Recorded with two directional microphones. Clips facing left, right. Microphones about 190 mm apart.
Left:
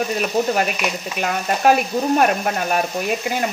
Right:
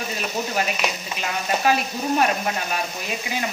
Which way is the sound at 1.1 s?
55° left (ahead or behind).